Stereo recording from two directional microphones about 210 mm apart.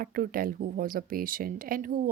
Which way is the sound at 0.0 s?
45° right (ahead or behind).